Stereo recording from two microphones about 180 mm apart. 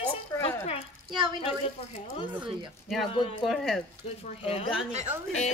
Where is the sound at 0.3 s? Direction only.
15° left (ahead or behind).